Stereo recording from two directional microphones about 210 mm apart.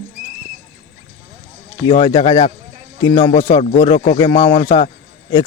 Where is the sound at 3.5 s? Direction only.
30° left (ahead or behind).